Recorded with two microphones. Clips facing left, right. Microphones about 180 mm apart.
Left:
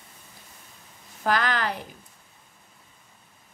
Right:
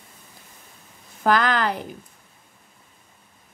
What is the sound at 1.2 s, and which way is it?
Speech, 50° right (ahead or behind).